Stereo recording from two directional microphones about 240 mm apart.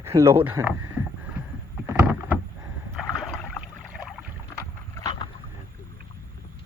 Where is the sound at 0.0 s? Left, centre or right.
Centre.